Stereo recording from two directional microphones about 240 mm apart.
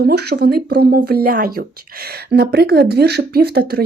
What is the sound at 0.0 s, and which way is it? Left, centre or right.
Speech, right.